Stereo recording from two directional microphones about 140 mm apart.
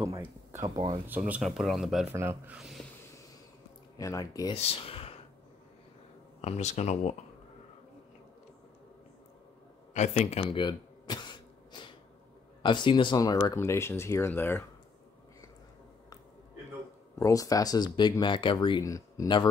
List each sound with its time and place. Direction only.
0.0 s a sound: 20° right (ahead or behind)
1.3 s speech: centre (ahead or behind)
2.1 s speech: 20° right (ahead or behind)
2.5 s speech: 5° right (ahead or behind)
4.0 s speech: 25° left (ahead or behind)
4.6 s speech: 45° left (ahead or behind)
6.4 s speech: 55° left (ahead or behind)
9.9 s speech: 55° left (ahead or behind)
10.4 s a sound: 35° left (ahead or behind)
12.6 s speech: 35° left (ahead or behind); by 14.6 s 15° left (ahead or behind)
17.1 s speech: 25° left (ahead or behind)